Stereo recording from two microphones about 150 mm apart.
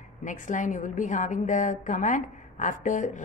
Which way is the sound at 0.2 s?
60° left (ahead or behind).